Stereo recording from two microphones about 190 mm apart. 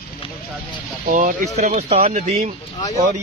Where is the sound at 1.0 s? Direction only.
50° right (ahead or behind).